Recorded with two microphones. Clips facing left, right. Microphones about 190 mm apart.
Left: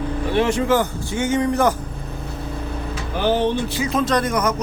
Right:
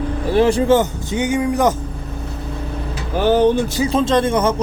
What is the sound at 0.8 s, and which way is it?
Speech, 20° right (ahead or behind).